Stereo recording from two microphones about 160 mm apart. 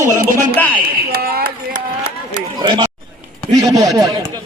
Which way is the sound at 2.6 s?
25° right (ahead or behind).